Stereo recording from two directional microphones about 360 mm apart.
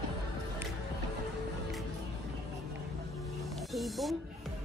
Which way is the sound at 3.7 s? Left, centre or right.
Centre.